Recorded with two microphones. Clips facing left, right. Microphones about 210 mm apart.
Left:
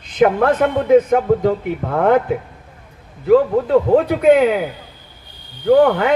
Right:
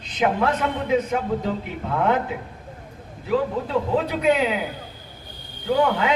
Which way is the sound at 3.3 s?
55° left (ahead or behind).